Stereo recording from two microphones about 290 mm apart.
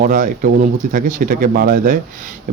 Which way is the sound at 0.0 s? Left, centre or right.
Right.